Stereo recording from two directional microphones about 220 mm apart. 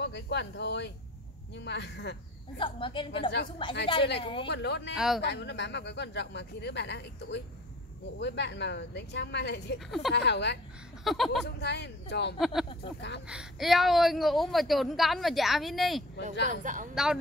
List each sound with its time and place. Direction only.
0.0 s speech: 50° left (ahead or behind)
2.5 s a woman's voice: 20° left (ahead or behind)
4.5 s speech: 50° left (ahead or behind)
4.9 s a woman's voice: centre (ahead or behind)
5.2 s speech: 50° left (ahead or behind)
9.8 s a woman's voice: centre (ahead or behind)
10.1 s speech: 50° left (ahead or behind)
11.1 s a woman's voice: centre (ahead or behind)
11.4 s speech: 50° left (ahead or behind)
12.4 s a woman's voice: centre (ahead or behind)
16.4 s speech: 35° right (ahead or behind)
16.9 s a woman's voice: 5° right (ahead or behind)